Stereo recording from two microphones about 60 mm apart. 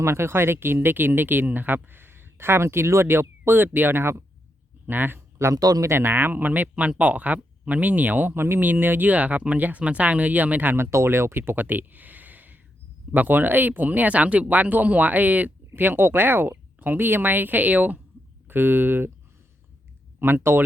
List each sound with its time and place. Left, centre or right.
0.0 s speech: right
5.5 s speech: right
5.8 s speech: right
15.7 s speech: right
20.1 s speech: right